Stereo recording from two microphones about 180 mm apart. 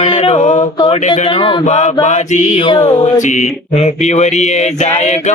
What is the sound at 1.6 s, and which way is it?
Mantra, 40° left (ahead or behind).